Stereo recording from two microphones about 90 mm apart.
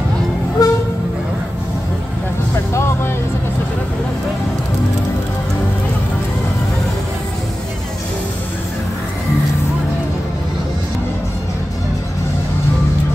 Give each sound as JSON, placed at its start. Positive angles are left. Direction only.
{"t": 0.6, "sound": "train", "side_deg": 45}
{"t": 2.7, "sound": "music", "side_deg": 30}